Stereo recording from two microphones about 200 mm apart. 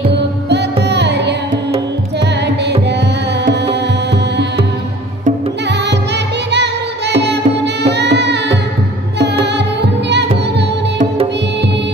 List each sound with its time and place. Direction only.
0.8 s carnatic music: 60° right (ahead or behind)
5.7 s music: 60° right (ahead or behind)